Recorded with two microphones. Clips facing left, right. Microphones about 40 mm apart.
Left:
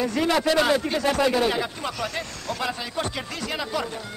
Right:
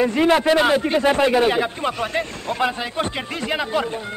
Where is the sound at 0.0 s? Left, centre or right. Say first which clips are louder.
Right 6 dB; right.